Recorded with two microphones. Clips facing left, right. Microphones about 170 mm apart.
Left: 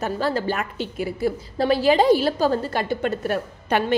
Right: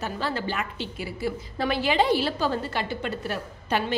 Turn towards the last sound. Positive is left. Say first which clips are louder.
# left 5 dB
turn(degrees=55)  # may be behind; listen again after turning